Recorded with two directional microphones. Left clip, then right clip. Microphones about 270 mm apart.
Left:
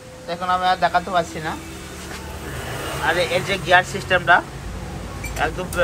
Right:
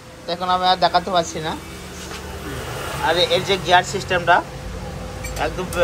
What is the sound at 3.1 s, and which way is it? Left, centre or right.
Speech, centre.